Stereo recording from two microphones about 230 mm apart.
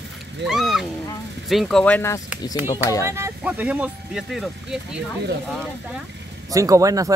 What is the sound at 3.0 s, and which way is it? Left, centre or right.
Speech, centre.